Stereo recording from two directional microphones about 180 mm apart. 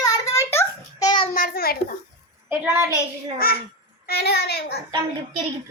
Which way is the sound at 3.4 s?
55° left (ahead or behind).